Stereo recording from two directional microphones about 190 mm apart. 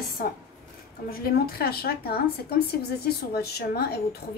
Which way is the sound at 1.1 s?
55° left (ahead or behind).